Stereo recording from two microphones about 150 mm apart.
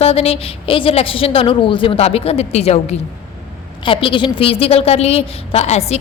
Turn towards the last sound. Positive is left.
turn(degrees=45)  # may be behind; listen again after turning